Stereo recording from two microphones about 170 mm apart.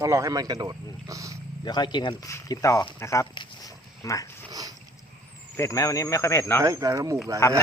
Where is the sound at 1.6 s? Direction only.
25° left (ahead or behind).